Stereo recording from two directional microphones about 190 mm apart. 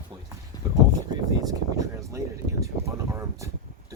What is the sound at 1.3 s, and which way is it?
Speech, 20° right (ahead or behind).